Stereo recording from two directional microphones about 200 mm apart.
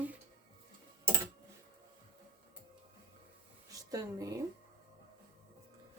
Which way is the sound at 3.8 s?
15° right (ahead or behind).